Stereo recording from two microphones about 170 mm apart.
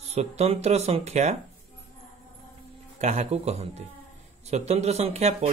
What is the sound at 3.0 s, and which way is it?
A man's voice, 40° right (ahead or behind).